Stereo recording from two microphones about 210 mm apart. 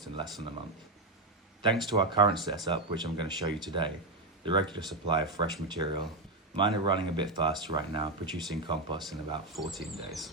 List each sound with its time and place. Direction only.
1.9 s speech: 20° right (ahead or behind)
9.6 s speech: centre (ahead or behind)